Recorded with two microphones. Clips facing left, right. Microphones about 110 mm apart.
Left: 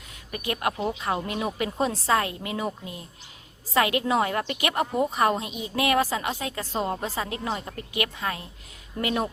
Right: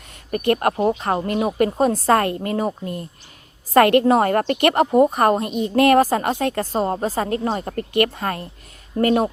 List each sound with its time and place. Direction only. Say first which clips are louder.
0.3 s a woman's voice: right 9 dB; 50° right (ahead or behind)